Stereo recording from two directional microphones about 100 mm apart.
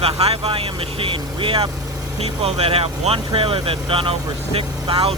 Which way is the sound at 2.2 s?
85° right.